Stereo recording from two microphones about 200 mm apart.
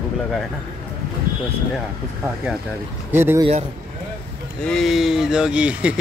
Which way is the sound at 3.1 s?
10° right (ahead or behind).